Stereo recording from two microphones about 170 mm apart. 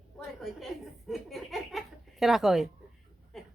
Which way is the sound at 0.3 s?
Centre (ahead or behind).